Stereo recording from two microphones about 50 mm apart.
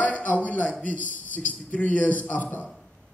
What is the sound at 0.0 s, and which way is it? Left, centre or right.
A man's voice, left.